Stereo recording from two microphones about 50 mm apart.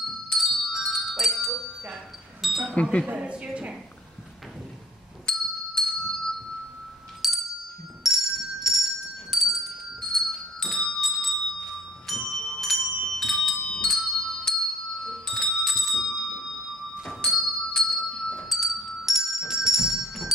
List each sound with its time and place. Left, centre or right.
0.3 s bell: centre
2.4 s wind chime: centre
2.7 s speech: left
3.2 s a woman's voice: right
5.3 s music: centre
5.8 s bell: centre
7.2 s a sound: centre
8.0 s bell: centre
9.3 s music: centre
9.9 s music: centre
11.0 s bell: centre
17.0 s music: centre
18.5 s music: centre